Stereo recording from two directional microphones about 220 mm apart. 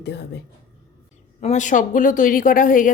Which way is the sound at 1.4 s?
35° left (ahead or behind).